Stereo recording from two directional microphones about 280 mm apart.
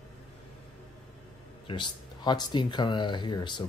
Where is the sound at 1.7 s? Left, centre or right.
Centre.